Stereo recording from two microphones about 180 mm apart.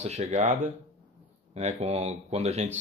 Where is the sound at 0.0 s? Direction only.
35° right (ahead or behind).